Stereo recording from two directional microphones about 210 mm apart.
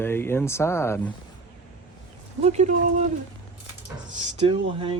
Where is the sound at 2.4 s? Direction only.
30° right (ahead or behind).